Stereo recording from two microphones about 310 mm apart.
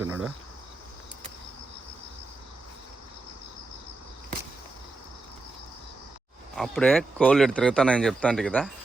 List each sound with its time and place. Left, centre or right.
0.0 s cricket: centre
6.6 s speech: centre